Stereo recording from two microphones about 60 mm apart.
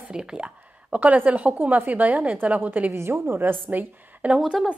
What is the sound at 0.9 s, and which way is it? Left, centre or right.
A woman's voice, right.